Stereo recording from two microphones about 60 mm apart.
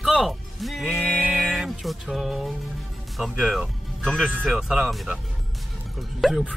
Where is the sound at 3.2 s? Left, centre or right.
Centre.